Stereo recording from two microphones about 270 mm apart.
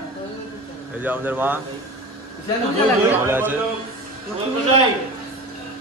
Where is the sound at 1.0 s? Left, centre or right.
Centre.